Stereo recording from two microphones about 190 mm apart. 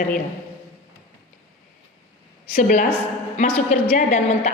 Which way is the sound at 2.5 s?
40° left (ahead or behind).